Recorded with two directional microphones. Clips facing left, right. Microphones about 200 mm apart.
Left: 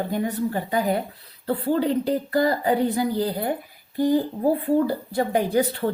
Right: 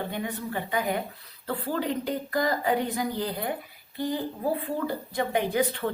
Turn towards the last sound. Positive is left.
turn(degrees=40)  # may be behind; listen again after turning